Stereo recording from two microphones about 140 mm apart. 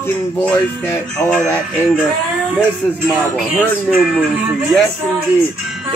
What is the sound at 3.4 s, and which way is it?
Speech, centre (ahead or behind).